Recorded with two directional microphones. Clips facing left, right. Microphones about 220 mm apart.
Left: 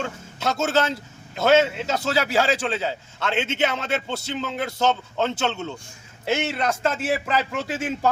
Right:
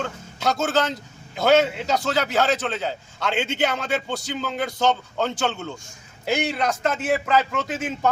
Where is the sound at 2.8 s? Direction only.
5° left (ahead or behind).